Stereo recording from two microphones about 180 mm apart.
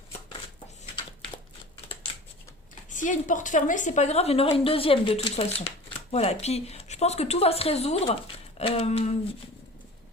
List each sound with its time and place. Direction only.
2.9 s speech: 45° left (ahead or behind)